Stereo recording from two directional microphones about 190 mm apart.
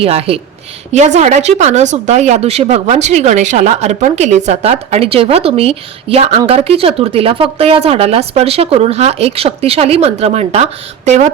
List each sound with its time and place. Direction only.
0.0 s speech: 30° right (ahead or behind)